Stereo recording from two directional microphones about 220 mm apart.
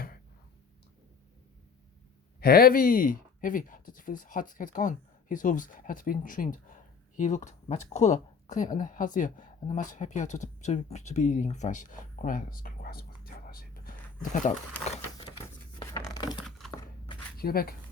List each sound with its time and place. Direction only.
2.4 s speech: 45° left (ahead or behind)
15.9 s crumpling: 15° left (ahead or behind)
16.4 s crumpling: centre (ahead or behind)
17.3 s speech: 45° left (ahead or behind)